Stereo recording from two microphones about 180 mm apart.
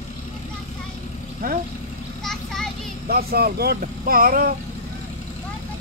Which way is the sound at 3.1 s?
60° right (ahead or behind).